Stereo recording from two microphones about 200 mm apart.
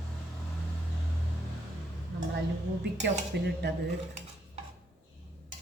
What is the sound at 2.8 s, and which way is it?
Speech, 55° right (ahead or behind).